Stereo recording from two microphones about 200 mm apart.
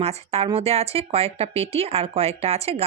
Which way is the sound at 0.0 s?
30° right (ahead or behind).